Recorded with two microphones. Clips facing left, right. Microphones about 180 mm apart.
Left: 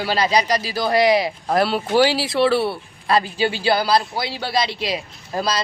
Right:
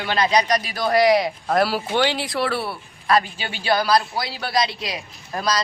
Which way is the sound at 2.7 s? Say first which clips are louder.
Even; 30° left (ahead or behind).